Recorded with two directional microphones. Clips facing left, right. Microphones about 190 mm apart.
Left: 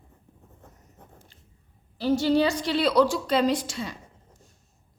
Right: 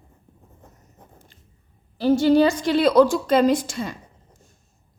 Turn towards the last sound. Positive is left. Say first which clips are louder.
# right 5 dB
turn(degrees=-50)  # may be behind; listen again after turning